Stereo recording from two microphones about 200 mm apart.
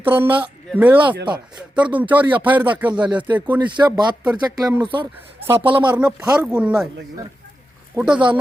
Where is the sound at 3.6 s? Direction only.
20° right (ahead or behind).